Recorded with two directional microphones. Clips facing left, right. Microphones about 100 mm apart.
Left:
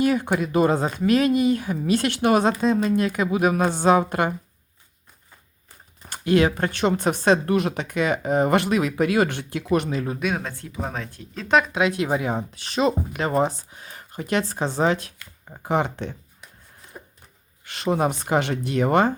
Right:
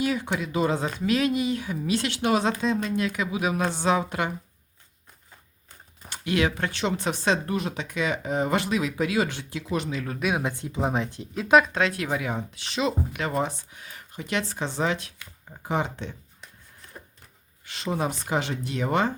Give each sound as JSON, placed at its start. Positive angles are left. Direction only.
{"t": 0.0, "sound": "speech", "side_deg": 50}
{"t": 6.1, "sound": "speech", "side_deg": 40}
{"t": 7.5, "sound": "speech", "side_deg": 60}
{"t": 10.2, "sound": "speech", "side_deg": -5}
{"t": 10.4, "sound": "speech", "side_deg": -20}
{"t": 11.4, "sound": "speech", "side_deg": -5}
{"t": 11.7, "sound": "speech", "side_deg": 15}
{"t": 15.6, "sound": "speech", "side_deg": 55}
{"t": 17.7, "sound": "speech", "side_deg": 55}